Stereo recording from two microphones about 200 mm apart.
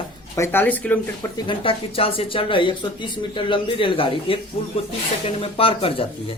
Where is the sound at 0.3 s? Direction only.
10° left (ahead or behind).